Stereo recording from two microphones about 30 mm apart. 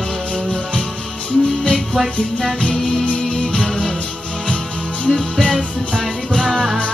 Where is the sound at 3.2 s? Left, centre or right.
Left.